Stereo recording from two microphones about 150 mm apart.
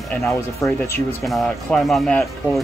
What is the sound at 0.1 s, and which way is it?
Speech, 20° left (ahead or behind).